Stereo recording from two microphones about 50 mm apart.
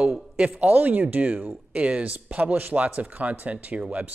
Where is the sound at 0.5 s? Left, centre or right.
Right.